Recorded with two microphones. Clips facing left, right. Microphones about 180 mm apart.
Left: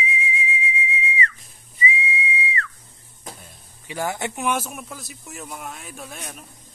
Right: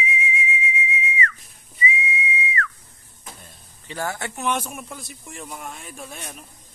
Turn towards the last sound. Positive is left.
turn(degrees=0)  # may be behind; listen again after turning